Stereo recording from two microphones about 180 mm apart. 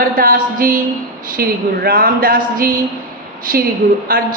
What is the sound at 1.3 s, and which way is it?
Speech, 55° right (ahead or behind).